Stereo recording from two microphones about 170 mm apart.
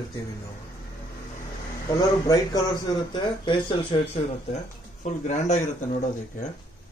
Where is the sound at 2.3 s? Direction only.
25° left (ahead or behind); by 5.6 s 45° left (ahead or behind).